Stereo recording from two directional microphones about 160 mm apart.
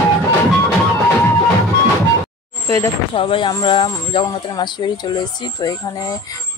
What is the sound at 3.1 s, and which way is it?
Speech, 35° left (ahead or behind).